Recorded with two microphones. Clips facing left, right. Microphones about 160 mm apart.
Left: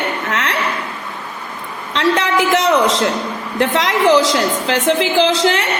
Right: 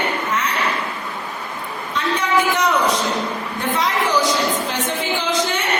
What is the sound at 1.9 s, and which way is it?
A woman's voice, 85° left.